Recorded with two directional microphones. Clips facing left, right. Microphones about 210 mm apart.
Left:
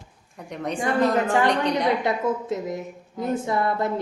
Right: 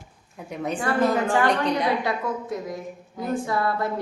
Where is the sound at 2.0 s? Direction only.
20° left (ahead or behind).